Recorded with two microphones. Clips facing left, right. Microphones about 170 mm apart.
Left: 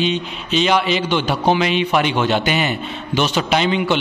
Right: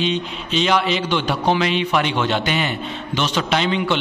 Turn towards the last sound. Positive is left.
turn(degrees=5)  # may be behind; listen again after turning